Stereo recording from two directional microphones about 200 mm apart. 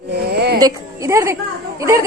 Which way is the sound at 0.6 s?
15° right (ahead or behind).